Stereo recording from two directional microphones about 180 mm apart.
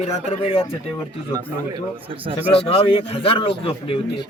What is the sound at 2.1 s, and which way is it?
Speech, 30° right (ahead or behind).